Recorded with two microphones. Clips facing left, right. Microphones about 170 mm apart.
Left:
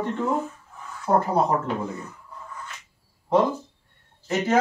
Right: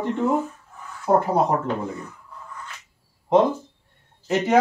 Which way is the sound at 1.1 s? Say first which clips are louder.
Right 2 dB; 15° right (ahead or behind).